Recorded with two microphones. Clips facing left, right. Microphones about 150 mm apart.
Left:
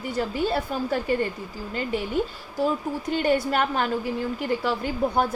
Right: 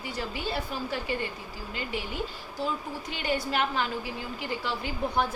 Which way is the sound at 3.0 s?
45° left (ahead or behind).